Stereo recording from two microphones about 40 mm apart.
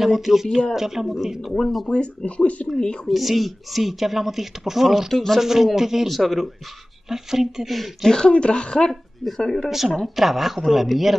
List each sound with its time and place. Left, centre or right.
0.0 s speech: centre
1.5 s speech: centre
1.9 s speech: left
3.1 s speech: centre
5.1 s speech: centre
5.4 s speech: centre
8.1 s speech: left
9.7 s speech: centre